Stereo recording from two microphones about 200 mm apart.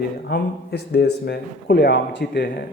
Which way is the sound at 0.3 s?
55° left (ahead or behind).